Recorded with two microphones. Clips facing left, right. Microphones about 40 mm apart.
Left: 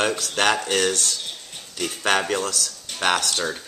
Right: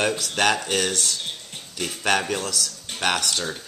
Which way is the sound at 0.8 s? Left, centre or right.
Centre.